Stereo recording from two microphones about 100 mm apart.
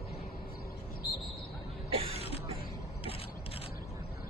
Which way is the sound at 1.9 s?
70° right (ahead or behind).